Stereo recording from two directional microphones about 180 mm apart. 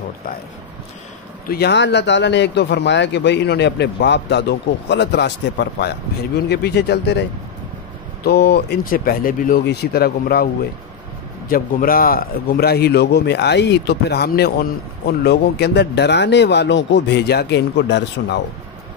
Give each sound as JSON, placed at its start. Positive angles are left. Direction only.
{"t": 1.5, "sound": "a man's voice", "side_deg": 70}
{"t": 8.3, "sound": "a man's voice", "side_deg": 65}